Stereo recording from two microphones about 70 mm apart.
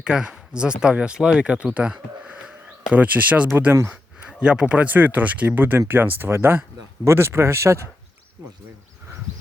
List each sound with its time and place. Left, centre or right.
0.0 s speech: centre
4.3 s a sound: centre
4.6 s speech: right